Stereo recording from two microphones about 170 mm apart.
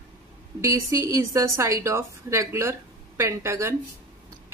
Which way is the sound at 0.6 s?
20° right (ahead or behind).